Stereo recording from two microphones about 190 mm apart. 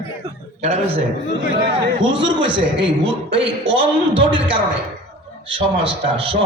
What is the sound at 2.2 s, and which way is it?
A man's voice, 25° right (ahead or behind).